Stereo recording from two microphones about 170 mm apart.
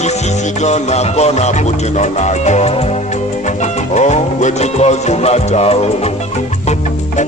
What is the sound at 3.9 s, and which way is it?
Music, 45° left (ahead or behind).